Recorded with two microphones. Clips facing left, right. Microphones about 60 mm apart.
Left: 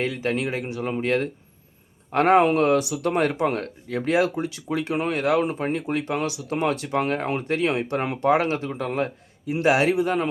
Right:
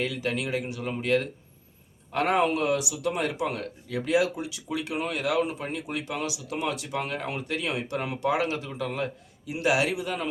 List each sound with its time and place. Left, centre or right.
0.0 s speech: left